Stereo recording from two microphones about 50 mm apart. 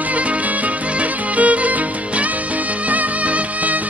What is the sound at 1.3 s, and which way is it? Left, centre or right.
Music, right.